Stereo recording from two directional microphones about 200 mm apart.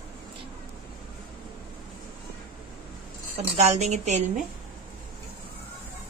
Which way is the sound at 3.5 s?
35° right (ahead or behind).